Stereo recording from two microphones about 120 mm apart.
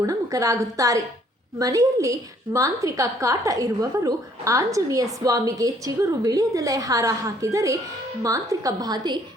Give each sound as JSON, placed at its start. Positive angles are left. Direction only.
{"t": 0.0, "sound": "a woman's voice", "side_deg": -30}